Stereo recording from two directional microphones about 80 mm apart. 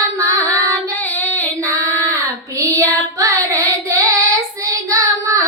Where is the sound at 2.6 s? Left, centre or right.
Right.